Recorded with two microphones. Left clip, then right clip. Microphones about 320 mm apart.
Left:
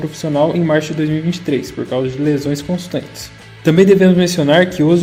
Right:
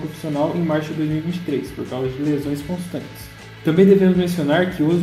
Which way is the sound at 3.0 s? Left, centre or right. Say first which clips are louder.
Left 8 dB; left.